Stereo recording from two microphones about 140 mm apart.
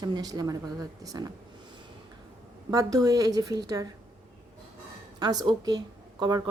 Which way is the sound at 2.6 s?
25° right (ahead or behind).